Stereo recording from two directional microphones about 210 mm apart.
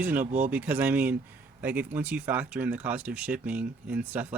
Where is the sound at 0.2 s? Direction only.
35° right (ahead or behind).